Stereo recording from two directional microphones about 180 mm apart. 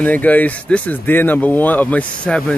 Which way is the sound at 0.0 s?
10° left (ahead or behind).